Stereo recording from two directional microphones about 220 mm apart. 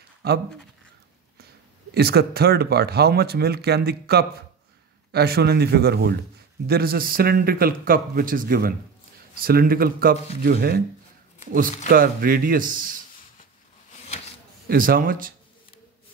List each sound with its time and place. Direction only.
2.0 s a man's voice: 45° right (ahead or behind)
11.9 s a man's voice: 40° right (ahead or behind)
14.7 s a man's voice: 40° right (ahead or behind)